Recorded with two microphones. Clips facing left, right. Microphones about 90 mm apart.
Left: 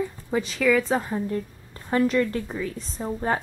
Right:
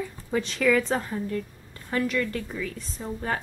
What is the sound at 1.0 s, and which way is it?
A woman's voice, 30° left (ahead or behind).